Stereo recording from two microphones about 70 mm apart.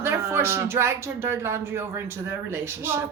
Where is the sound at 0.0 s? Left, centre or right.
Right.